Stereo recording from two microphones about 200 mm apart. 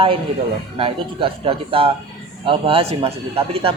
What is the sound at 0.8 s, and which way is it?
A man's voice, 25° right (ahead or behind).